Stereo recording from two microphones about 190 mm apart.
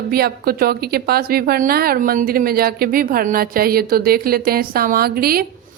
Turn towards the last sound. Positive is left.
turn(degrees=-55)  # may be behind; listen again after turning